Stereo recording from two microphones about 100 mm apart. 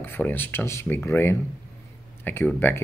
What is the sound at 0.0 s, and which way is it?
Speech, 20° left (ahead or behind).